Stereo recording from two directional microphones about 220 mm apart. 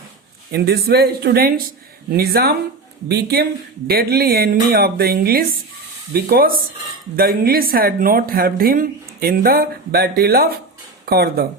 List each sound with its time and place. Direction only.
0.5 s speech: 45° right (ahead or behind)